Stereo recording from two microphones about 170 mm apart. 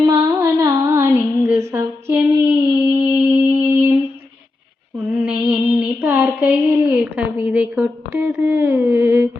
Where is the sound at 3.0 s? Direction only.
15° right (ahead or behind).